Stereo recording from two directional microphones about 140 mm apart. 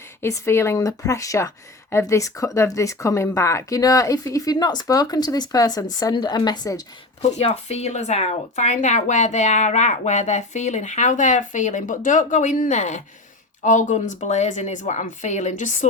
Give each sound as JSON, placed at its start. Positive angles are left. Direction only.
{"t": 0.2, "sound": "speech", "side_deg": 20}
{"t": 7.2, "sound": "speech", "side_deg": 50}